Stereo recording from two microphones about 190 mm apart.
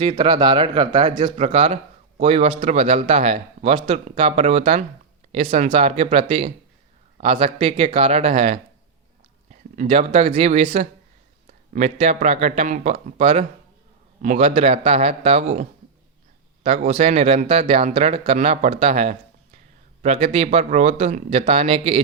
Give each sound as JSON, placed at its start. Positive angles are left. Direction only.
{"t": 0.0, "sound": "speech", "side_deg": -30}
{"t": 16.6, "sound": "speech", "side_deg": -35}